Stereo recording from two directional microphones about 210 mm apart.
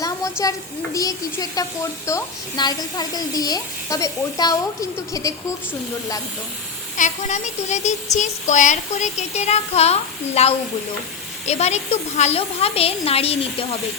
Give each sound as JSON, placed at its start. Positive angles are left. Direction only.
{"t": 0.0, "sound": "a sound", "side_deg": 15}
{"t": 0.9, "sound": "a woman's voice", "side_deg": 15}
{"t": 6.9, "sound": "a woman's voice", "side_deg": 35}